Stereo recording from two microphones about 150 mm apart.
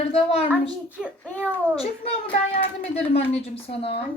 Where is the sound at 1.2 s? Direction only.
10° left (ahead or behind).